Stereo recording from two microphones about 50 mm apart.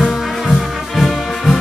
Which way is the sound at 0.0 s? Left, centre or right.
Centre.